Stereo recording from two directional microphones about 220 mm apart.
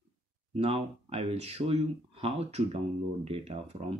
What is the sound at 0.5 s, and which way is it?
Speech, 25° right (ahead or behind).